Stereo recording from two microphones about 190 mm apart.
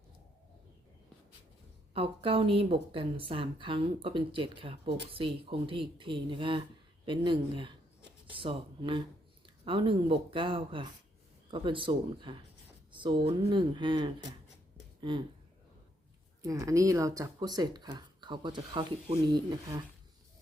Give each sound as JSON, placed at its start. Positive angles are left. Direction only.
{"t": 1.9, "sound": "a woman's voice", "side_deg": -30}
{"t": 16.4, "sound": "a woman's voice", "side_deg": -15}